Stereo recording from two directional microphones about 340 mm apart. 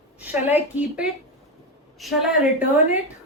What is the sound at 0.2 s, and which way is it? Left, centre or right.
A woman's voice, centre.